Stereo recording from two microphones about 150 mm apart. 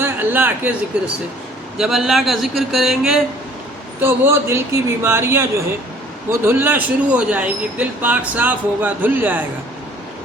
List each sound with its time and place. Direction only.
0.0 s a man's voice: 10° right (ahead or behind)
4.0 s a man's voice: 15° right (ahead or behind)